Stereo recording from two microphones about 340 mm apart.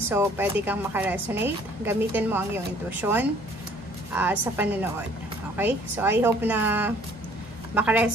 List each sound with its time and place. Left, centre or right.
0.1 s a woman's voice: centre